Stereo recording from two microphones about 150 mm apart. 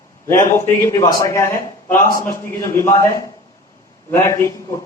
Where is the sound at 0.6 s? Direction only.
25° left (ahead or behind).